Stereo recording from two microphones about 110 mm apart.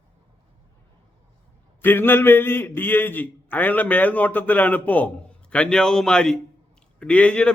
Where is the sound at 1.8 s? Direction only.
20° left (ahead or behind).